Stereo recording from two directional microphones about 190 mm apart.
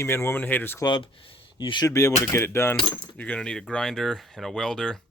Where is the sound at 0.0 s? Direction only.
15° left (ahead or behind).